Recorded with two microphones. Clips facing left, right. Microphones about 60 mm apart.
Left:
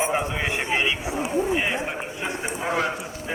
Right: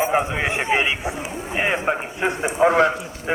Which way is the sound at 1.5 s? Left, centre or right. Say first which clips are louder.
Right 4 dB; right.